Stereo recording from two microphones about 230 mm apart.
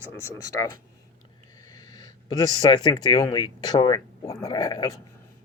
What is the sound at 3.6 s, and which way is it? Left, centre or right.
Speech, centre.